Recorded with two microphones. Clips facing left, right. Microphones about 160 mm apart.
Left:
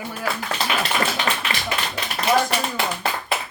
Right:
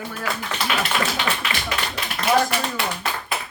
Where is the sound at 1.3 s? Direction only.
35° left (ahead or behind).